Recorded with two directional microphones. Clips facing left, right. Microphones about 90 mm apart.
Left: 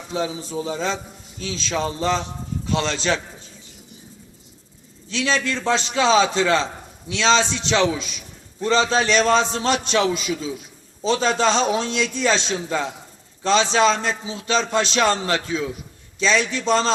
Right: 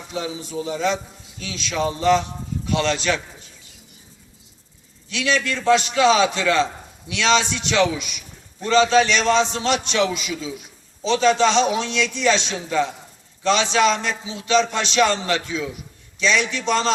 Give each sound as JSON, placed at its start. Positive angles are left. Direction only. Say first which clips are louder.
{"t": 0.1, "sound": "a man's voice", "louder": "left 3 dB", "side_deg": 35}
{"t": 5.0, "sound": "a man's voice", "louder": "even", "side_deg": 35}